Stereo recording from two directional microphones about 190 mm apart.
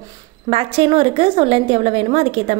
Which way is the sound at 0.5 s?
30° right (ahead or behind).